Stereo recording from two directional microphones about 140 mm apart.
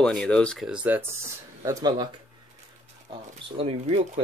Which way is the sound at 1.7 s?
25° right (ahead or behind).